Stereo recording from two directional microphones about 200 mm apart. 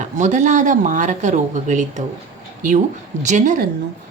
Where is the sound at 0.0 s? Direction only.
35° right (ahead or behind).